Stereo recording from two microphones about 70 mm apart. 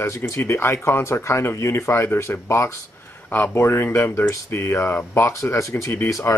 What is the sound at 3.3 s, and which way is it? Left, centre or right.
Speech, left.